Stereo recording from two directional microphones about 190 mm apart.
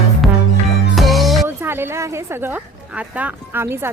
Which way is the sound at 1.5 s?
10° right (ahead or behind).